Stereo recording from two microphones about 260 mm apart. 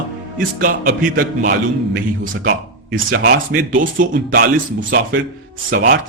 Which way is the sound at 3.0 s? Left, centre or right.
Right.